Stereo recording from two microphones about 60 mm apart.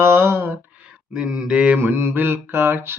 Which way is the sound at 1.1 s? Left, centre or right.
Centre.